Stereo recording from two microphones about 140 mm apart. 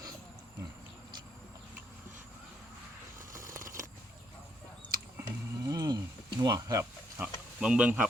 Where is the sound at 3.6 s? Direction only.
75° right (ahead or behind).